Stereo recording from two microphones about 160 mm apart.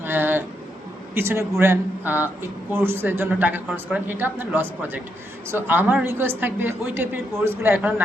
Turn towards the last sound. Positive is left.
turn(degrees=-15)  # may be behind; listen again after turning